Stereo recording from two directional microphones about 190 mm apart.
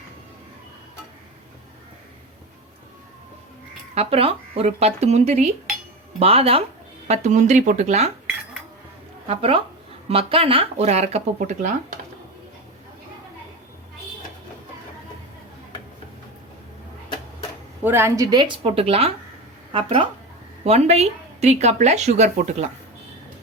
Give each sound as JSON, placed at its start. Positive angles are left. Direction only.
{"t": 3.9, "sound": "speech", "side_deg": -30}
{"t": 9.2, "sound": "a woman's voice", "side_deg": -30}
{"t": 17.8, "sound": "a woman's voice", "side_deg": -10}